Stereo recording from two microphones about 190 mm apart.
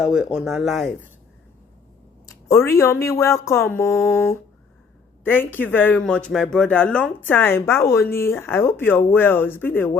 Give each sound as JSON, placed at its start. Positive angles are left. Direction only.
{"t": 0.0, "sound": "speech", "side_deg": -5}
{"t": 2.2, "sound": "a woman's voice", "side_deg": 15}